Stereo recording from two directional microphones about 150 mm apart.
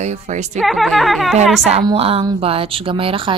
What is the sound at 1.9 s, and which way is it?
Speech, 40° right (ahead or behind).